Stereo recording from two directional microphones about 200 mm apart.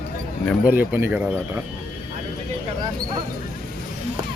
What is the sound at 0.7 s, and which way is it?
Speech, 10° right (ahead or behind).